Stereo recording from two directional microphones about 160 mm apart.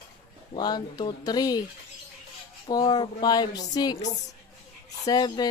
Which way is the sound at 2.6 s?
25° left (ahead or behind).